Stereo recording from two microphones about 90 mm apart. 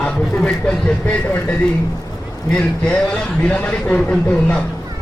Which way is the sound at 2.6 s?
10° left (ahead or behind).